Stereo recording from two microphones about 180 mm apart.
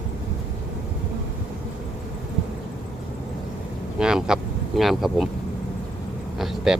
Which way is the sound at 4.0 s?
5° right (ahead or behind).